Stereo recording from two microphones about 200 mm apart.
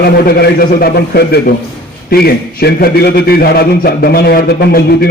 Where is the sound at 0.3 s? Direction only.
50° left (ahead or behind).